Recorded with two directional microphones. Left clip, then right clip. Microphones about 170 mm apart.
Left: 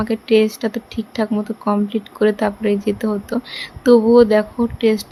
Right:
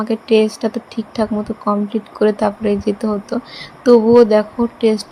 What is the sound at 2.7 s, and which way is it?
Speech, 60° left (ahead or behind).